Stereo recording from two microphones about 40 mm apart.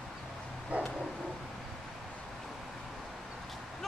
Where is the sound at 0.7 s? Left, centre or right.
Right.